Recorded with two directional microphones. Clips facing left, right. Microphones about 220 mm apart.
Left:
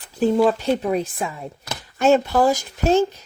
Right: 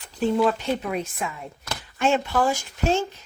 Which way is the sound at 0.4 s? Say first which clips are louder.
Left 5 dB; 35° left (ahead or behind).